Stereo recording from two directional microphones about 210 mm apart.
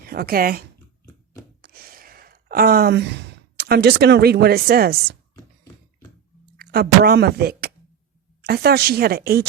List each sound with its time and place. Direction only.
0.0 s speech: 45° right (ahead or behind)
1.6 s gasp: 45° right (ahead or behind)
6.6 s speech: 45° right (ahead or behind)